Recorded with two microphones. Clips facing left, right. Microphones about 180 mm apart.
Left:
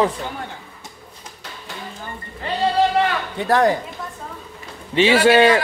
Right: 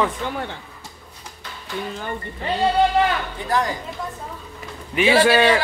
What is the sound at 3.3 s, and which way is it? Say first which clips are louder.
Speech: left 6 dB; 65° left (ahead or behind).